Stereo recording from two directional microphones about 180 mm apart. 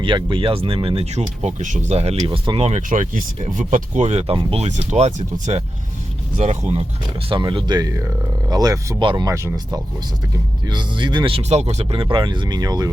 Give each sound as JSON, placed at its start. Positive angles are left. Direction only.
{"t": 0.0, "sound": "speech", "side_deg": -25}